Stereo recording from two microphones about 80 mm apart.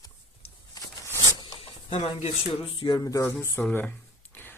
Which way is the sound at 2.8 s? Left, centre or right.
Left.